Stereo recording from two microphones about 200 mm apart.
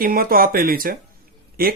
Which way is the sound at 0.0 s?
45° right (ahead or behind).